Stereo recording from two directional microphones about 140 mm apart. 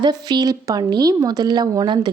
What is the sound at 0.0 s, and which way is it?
Speech, 30° right (ahead or behind).